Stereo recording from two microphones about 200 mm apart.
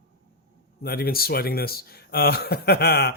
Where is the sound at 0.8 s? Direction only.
50° left (ahead or behind).